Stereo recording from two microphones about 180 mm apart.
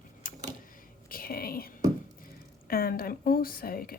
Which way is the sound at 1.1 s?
55° left (ahead or behind).